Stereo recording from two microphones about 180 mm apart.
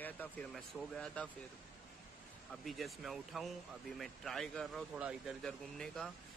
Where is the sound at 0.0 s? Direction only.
10° left (ahead or behind).